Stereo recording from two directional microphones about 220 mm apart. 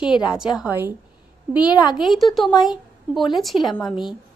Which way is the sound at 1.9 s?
Centre (ahead or behind).